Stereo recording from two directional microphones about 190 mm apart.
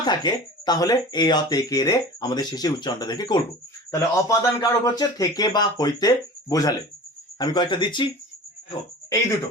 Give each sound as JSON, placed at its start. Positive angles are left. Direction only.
{"t": 0.0, "sound": "speech", "side_deg": 25}